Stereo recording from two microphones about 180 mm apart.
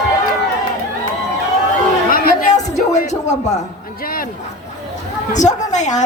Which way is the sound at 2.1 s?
40° left (ahead or behind).